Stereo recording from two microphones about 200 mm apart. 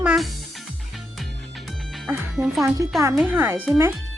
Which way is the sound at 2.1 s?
Centre (ahead or behind).